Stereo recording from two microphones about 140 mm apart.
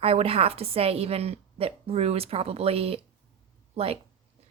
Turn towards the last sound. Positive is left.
turn(degrees=-45)  # may be behind; listen again after turning